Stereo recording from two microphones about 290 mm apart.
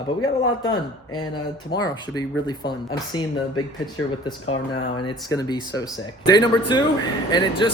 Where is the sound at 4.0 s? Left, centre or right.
Left.